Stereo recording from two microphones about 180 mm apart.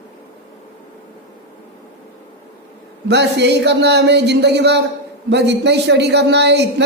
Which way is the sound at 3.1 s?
70° right (ahead or behind).